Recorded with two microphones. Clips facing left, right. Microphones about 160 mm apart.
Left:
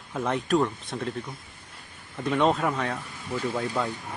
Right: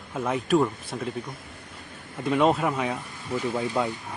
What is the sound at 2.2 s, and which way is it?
Speech, 5° right (ahead or behind).